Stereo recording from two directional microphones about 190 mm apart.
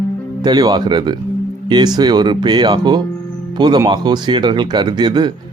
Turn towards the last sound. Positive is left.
turn(degrees=-25)  # may be behind; listen again after turning